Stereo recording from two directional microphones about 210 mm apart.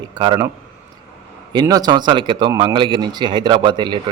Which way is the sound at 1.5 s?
20° right (ahead or behind).